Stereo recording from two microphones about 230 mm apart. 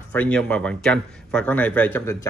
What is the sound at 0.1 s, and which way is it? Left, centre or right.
A man's voice, centre.